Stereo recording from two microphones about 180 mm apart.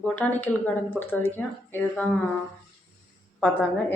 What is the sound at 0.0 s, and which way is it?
Speech, 10° left (ahead or behind).